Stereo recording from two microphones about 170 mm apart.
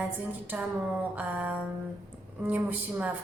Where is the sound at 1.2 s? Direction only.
10° right (ahead or behind).